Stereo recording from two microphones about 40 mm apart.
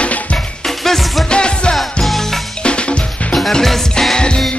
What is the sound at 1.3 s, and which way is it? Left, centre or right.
Music, left.